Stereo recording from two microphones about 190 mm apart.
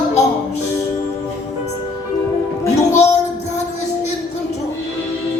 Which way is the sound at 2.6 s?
15° left (ahead or behind).